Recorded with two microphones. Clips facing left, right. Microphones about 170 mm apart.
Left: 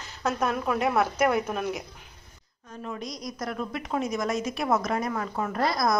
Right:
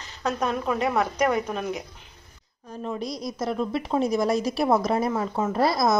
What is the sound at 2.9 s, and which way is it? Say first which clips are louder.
A woman's voice: right 5 dB; 30° right (ahead or behind).